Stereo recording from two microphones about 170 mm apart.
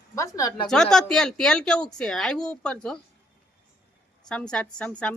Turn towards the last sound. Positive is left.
turn(degrees=5)  # may be behind; listen again after turning